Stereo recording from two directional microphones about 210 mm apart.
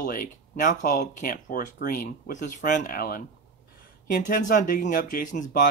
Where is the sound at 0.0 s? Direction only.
40° left (ahead or behind).